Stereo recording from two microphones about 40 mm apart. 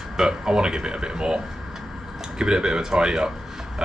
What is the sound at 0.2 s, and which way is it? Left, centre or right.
Speech, centre.